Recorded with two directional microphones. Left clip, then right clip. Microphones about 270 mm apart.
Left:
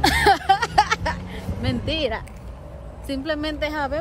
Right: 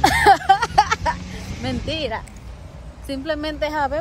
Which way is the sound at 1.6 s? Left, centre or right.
Centre.